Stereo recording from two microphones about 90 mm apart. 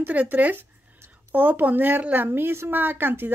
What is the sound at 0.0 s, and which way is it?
A woman's voice, 15° right (ahead or behind).